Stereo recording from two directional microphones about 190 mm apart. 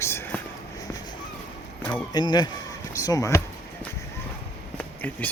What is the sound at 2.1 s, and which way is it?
Speech, 20° left (ahead or behind).